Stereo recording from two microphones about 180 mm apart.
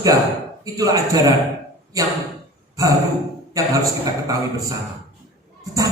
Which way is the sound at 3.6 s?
15° right (ahead or behind).